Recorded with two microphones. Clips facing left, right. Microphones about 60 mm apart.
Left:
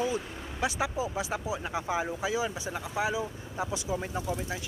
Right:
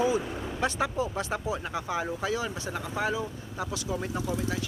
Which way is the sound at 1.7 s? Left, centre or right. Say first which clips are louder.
Even; centre.